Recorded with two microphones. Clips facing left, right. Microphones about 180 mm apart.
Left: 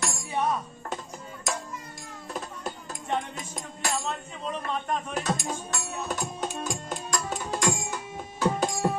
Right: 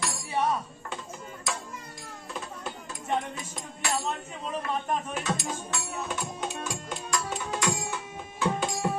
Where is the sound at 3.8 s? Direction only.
40° left (ahead or behind).